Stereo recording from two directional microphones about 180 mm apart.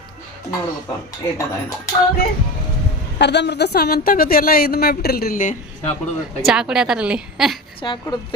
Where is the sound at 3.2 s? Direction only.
70° left (ahead or behind); by 5.6 s 50° left (ahead or behind).